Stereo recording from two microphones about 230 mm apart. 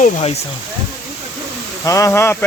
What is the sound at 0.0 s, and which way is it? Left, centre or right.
Speech, left.